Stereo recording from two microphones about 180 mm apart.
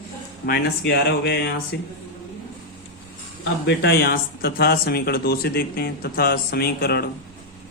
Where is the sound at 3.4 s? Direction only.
70° left (ahead or behind).